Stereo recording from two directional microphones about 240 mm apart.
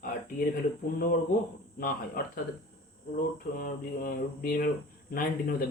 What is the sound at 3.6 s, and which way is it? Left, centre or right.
Speech, left.